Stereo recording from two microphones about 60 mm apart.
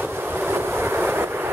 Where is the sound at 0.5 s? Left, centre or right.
Right.